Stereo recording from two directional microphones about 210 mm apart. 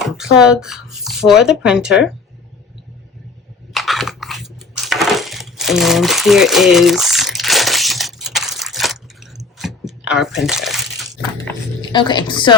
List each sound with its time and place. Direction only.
0.1 s speech: 5° right (ahead or behind)
3.7 s a sound: centre (ahead or behind)
11.8 s a woman's voice: 20° left (ahead or behind)